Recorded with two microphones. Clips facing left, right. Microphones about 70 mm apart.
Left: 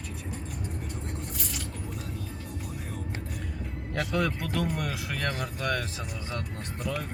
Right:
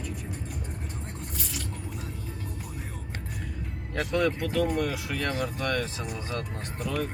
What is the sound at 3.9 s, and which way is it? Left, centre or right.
Speech, centre.